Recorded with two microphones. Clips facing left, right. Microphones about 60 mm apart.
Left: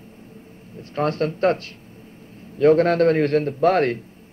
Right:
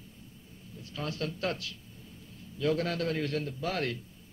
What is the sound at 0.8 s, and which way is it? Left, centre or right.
A man's voice, left.